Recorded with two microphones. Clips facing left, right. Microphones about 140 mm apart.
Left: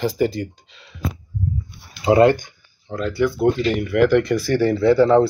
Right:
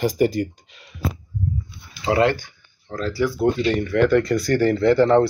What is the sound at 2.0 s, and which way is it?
Speech, 20° left (ahead or behind).